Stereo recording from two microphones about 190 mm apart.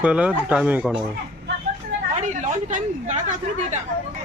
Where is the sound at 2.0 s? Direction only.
40° right (ahead or behind).